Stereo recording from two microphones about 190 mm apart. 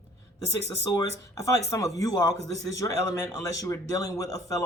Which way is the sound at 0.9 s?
20° left (ahead or behind).